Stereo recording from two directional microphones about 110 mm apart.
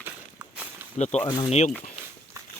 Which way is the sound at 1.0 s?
90° left.